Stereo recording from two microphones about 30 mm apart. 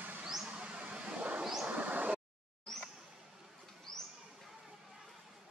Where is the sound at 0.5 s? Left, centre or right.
Right.